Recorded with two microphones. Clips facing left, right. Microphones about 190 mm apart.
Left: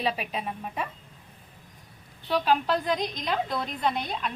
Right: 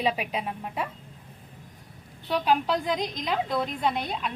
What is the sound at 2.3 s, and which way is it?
Speech, 15° right (ahead or behind).